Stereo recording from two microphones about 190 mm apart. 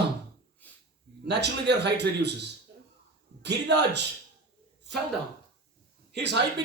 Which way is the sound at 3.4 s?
65° right (ahead or behind).